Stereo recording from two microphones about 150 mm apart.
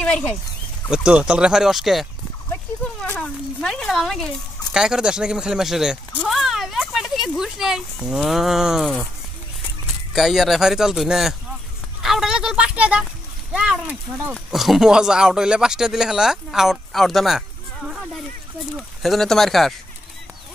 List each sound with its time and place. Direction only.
0.0 s speech: 5° left (ahead or behind)
0.8 s speech: 5° right (ahead or behind)
3.2 s speech: 5° left (ahead or behind)
10.1 s speech: centre (ahead or behind)
12.0 s a sound: 5° right (ahead or behind)
13.5 s speech: 5° right (ahead or behind)
14.3 s speech: centre (ahead or behind)
18.8 s speech: centre (ahead or behind)